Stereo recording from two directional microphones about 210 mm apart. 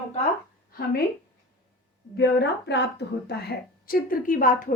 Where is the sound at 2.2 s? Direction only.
55° left (ahead or behind).